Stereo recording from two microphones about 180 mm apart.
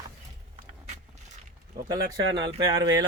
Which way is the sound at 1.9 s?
25° right (ahead or behind).